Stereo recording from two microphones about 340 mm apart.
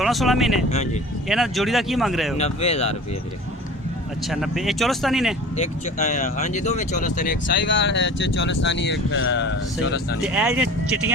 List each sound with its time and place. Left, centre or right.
0.0 s speech: centre
2.4 s speech: centre
4.3 s speech: centre
5.5 s speech: left
10.2 s speech: centre